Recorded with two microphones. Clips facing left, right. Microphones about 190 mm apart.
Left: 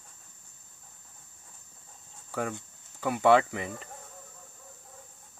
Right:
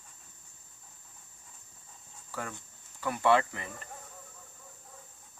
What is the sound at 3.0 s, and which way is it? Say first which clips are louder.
Speech: left 4 dB; 70° left (ahead or behind).